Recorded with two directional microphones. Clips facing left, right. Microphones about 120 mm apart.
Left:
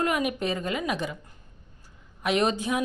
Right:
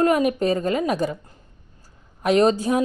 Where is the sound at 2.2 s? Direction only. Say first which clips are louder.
Right 7 dB; 40° right (ahead or behind).